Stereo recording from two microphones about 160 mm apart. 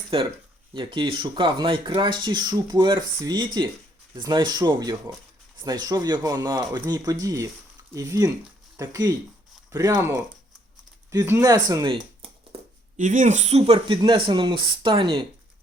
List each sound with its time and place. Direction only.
0.7 s speech: 30° right (ahead or behind)
13.0 s speech: 50° right (ahead or behind); by 15.2 s 30° right (ahead or behind)